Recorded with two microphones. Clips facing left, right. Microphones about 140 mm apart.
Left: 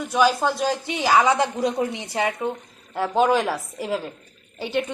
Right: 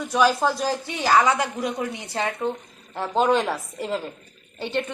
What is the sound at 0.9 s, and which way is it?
Speech, 20° left (ahead or behind).